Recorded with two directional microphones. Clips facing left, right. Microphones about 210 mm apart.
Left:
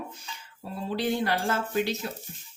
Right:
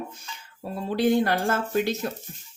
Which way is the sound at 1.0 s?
50° right (ahead or behind).